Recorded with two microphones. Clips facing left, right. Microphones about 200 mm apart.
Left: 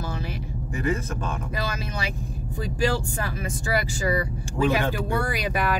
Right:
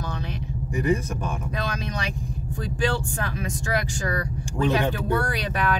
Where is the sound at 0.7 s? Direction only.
15° right (ahead or behind).